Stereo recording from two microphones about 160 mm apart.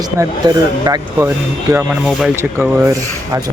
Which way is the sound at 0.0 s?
25° right (ahead or behind).